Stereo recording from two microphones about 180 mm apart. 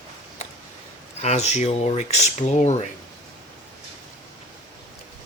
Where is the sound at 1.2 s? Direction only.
40° left (ahead or behind).